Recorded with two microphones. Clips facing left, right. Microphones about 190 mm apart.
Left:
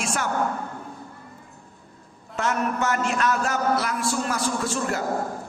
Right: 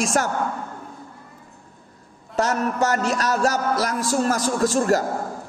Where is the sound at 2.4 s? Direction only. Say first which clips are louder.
Right 4 dB; 40° right (ahead or behind).